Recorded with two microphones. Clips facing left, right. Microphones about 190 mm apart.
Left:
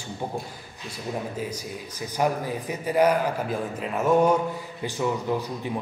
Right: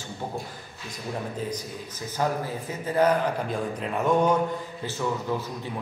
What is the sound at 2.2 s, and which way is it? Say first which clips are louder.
A man's voice: left 2 dB; 15° left (ahead or behind).